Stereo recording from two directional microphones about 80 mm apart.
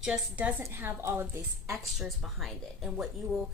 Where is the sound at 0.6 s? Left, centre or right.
Right.